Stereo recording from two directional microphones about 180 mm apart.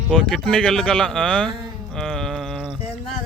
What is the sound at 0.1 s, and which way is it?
Speech, 5° left (ahead or behind).